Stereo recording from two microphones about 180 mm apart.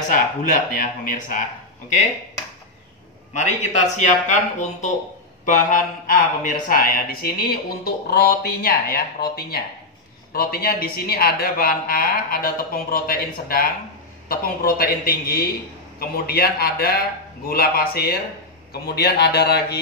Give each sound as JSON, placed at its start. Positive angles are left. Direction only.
{"t": 0.1, "sound": "speech", "side_deg": 50}
{"t": 3.3, "sound": "a man's voice", "side_deg": 40}
{"t": 5.4, "sound": "speech", "side_deg": 45}